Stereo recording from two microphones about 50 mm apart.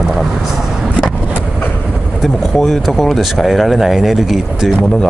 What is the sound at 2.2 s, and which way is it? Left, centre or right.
Speech, centre.